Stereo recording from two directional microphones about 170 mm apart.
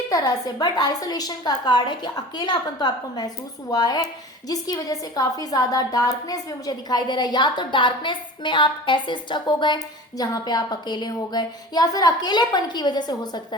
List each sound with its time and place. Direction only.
0.1 s a woman's voice: 25° left (ahead or behind)